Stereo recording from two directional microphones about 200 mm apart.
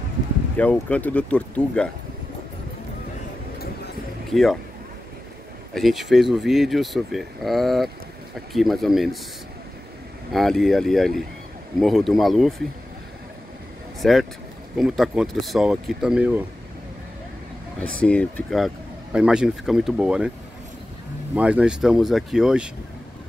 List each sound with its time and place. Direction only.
0.6 s speech: 5° left (ahead or behind)
3.5 s a sound: 50° left (ahead or behind)
4.3 s speech: centre (ahead or behind)
5.8 s speech: centre (ahead or behind)
10.3 s speech: centre (ahead or behind)
14.0 s speech: centre (ahead or behind)
17.7 s speech: 5° left (ahead or behind)
21.4 s speech: 5° right (ahead or behind)